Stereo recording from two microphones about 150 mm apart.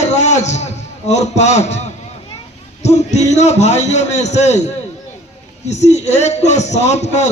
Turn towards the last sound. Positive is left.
turn(degrees=50)  # may be behind; listen again after turning